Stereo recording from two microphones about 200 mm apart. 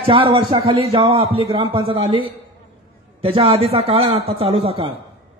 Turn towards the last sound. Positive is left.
turn(degrees=-30)  # may be behind; listen again after turning